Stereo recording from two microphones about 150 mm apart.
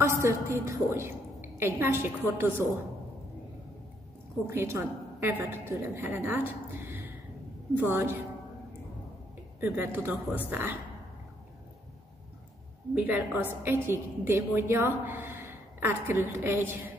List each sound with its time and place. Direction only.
0.0 s a woman's voice: 20° right (ahead or behind)
4.5 s a woman's voice: 15° right (ahead or behind)
9.6 s a woman's voice: 15° right (ahead or behind)
12.9 s a woman's voice: 10° right (ahead or behind)